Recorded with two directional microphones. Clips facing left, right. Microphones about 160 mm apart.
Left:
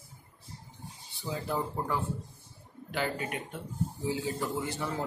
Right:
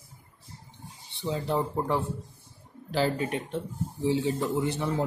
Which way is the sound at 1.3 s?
25° right (ahead or behind).